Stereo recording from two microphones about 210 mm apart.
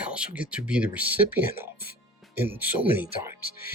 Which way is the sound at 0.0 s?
5° right (ahead or behind).